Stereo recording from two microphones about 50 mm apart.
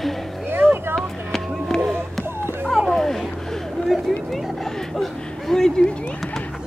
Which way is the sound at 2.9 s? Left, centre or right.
Centre.